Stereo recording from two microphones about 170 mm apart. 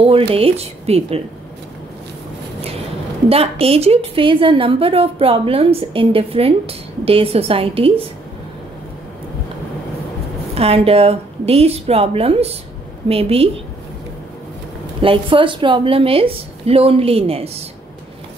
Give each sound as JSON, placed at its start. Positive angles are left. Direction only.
{"t": 0.0, "sound": "a woman's voice", "side_deg": -35}
{"t": 3.3, "sound": "a woman's voice", "side_deg": -35}
{"t": 10.5, "sound": "a woman's voice", "side_deg": -35}
{"t": 15.0, "sound": "a woman's voice", "side_deg": -30}